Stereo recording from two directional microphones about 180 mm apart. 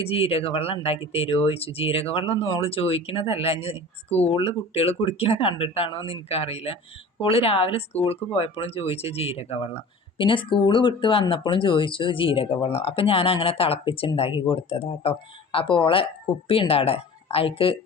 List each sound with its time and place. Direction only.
0.0 s speech: 30° left (ahead or behind)